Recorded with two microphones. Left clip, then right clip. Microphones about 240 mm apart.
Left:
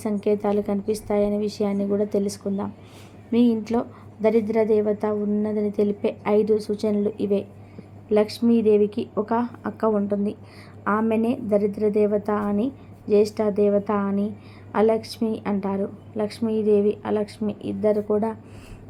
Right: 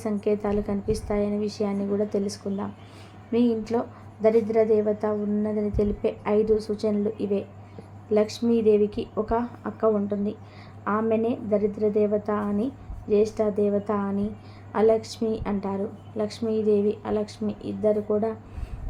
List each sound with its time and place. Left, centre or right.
0.0 s a woman's voice: centre